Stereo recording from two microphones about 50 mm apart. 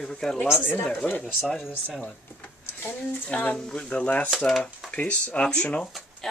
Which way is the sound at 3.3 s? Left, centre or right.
Left.